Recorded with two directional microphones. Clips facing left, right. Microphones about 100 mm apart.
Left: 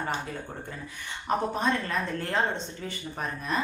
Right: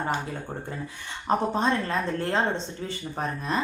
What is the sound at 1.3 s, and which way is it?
Speech, 30° right (ahead or behind).